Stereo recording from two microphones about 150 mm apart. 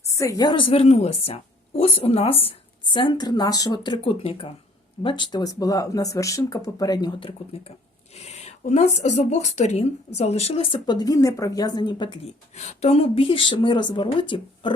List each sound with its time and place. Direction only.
0.1 s a woman's voice: 20° left (ahead or behind)
12.2 s a woman's voice: 45° left (ahead or behind)